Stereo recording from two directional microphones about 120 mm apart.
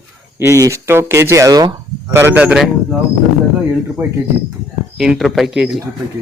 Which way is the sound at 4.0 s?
15° right (ahead or behind).